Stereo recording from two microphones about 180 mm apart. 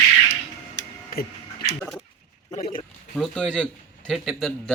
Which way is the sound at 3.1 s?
5° left (ahead or behind).